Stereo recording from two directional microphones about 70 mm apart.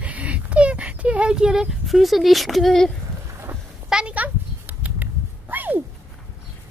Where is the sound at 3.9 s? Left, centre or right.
Centre.